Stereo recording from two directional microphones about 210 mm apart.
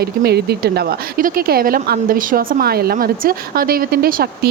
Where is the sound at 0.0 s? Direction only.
50° right (ahead or behind).